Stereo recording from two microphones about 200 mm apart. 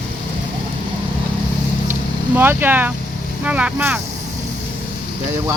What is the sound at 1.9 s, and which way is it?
Speech, 10° right (ahead or behind).